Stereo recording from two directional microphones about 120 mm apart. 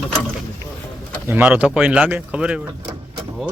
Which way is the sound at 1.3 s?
15° right (ahead or behind).